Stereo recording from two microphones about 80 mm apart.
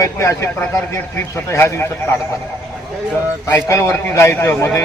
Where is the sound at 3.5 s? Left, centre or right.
Left.